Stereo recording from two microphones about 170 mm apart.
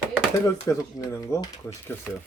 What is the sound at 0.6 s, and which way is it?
Speech, 15° left (ahead or behind).